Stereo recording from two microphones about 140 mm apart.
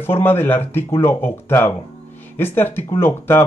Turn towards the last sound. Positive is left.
turn(degrees=15)  # may be behind; listen again after turning